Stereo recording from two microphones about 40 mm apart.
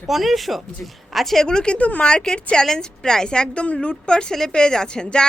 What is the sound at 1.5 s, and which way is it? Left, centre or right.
A woman's voice, left.